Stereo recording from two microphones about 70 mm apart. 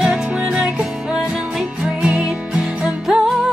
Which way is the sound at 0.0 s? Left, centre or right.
Centre.